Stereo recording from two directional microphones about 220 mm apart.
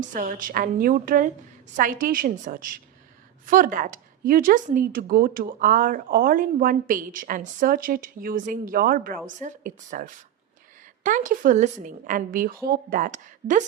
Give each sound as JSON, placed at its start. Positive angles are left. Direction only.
{"t": 0.0, "sound": "a woman's voice", "side_deg": -35}